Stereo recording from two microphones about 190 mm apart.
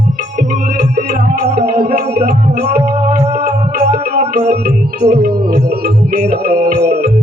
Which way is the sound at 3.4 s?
35° right (ahead or behind).